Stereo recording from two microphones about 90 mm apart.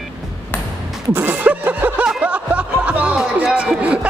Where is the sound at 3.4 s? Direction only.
10° right (ahead or behind).